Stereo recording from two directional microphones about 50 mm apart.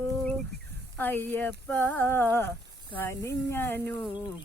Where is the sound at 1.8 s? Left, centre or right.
Left.